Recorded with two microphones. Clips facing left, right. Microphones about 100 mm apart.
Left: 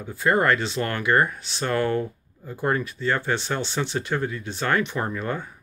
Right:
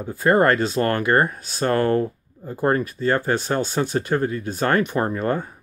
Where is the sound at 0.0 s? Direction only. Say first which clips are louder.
Right 4 dB; 40° right (ahead or behind).